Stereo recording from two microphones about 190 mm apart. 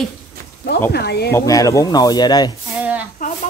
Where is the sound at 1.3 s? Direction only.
20° left (ahead or behind).